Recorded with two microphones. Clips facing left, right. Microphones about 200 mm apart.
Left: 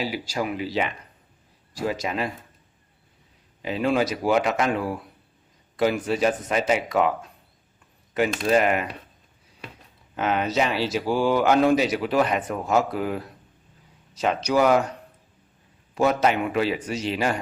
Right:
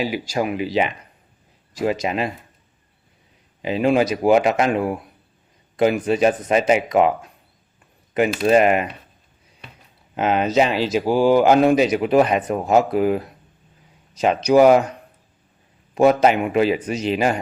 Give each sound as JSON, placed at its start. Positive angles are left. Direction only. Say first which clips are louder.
{"t": 0.0, "sound": "speech", "louder": "right 5 dB", "side_deg": -15}
{"t": 3.6, "sound": "speech", "louder": "right 5 dB", "side_deg": -15}
{"t": 8.4, "sound": "speech", "louder": "right 6 dB", "side_deg": -20}
{"t": 10.2, "sound": "speech", "louder": "right 5 dB", "side_deg": -20}
{"t": 16.0, "sound": "speech", "louder": "right 6 dB", "side_deg": -20}